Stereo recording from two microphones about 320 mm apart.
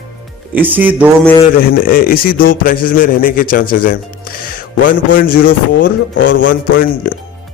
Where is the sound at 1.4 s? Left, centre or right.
Left.